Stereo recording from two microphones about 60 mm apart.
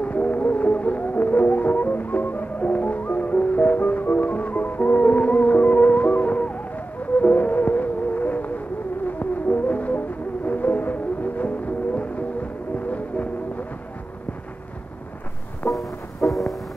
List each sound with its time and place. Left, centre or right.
0.0 s music: left
15.7 s music: left
16.3 s music: centre